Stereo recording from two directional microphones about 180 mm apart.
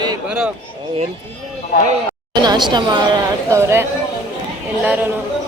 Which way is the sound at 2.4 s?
25° right (ahead or behind).